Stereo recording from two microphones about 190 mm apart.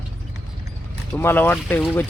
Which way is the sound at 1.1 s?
10° left (ahead or behind).